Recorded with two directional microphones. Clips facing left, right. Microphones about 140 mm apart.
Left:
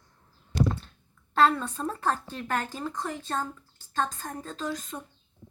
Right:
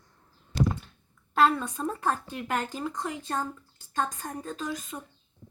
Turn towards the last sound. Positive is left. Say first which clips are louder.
# left 1 dB
turn(degrees=-5)  # may be behind; listen again after turning